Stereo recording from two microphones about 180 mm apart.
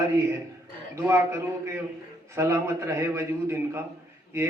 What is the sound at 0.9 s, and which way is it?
A man's voice, 15° right (ahead or behind).